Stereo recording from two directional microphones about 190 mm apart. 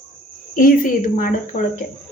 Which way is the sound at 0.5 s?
45° left (ahead or behind).